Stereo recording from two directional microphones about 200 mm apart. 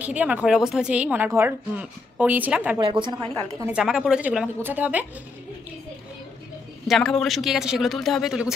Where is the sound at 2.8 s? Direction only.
25° right (ahead or behind).